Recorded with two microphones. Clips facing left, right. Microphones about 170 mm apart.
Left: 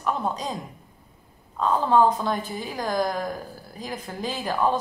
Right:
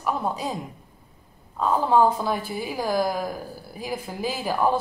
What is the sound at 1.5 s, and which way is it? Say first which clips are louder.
A woman's voice: even; 10° right (ahead or behind).